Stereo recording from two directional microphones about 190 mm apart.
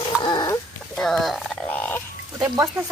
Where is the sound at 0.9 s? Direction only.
Centre (ahead or behind).